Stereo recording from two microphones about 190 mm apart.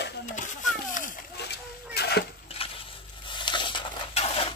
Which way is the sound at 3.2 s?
25° left (ahead or behind).